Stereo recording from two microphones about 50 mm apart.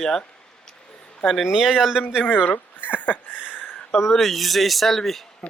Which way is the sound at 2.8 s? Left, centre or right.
Left.